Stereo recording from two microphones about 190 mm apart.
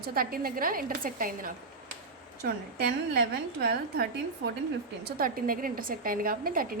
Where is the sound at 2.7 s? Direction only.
60° right (ahead or behind).